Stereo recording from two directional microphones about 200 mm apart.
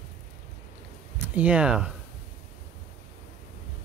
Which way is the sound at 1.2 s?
5° right (ahead or behind).